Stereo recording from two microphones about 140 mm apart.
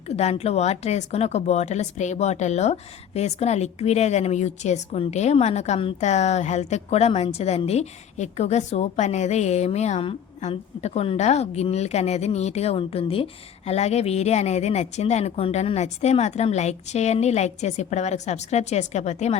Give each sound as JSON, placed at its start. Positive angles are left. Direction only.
{"t": 0.1, "sound": "speech", "side_deg": 50}